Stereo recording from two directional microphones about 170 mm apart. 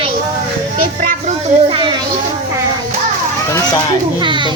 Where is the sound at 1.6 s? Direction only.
30° right (ahead or behind).